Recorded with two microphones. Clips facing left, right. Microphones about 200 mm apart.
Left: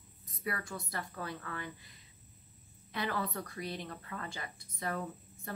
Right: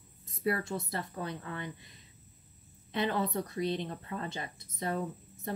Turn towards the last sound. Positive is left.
turn(degrees=-25)  # may be behind; listen again after turning